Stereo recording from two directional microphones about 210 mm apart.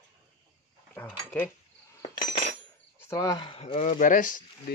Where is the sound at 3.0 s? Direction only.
15° left (ahead or behind); by 4.4 s 40° left (ahead or behind).